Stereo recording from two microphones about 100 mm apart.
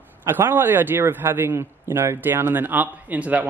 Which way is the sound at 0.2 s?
25° right (ahead or behind).